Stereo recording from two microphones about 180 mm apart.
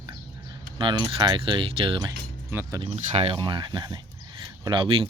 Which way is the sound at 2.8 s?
35° right (ahead or behind).